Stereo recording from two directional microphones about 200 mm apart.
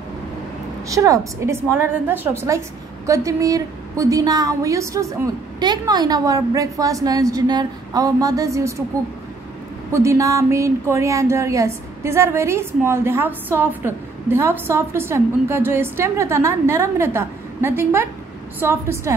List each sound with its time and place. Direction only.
0.8 s a woman's voice: 15° right (ahead or behind)
9.8 s a woman's voice: 15° right (ahead or behind)